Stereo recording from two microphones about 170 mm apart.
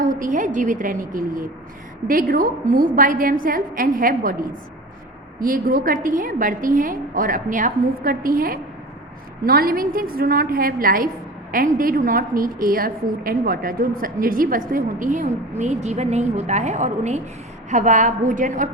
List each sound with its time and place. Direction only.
0.0 s a woman's voice: 50° right (ahead or behind)